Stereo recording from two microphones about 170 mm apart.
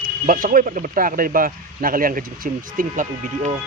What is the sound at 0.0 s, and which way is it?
Speech, 55° right (ahead or behind).